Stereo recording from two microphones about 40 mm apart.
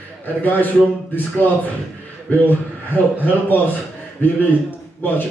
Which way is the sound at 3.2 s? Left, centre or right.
Left.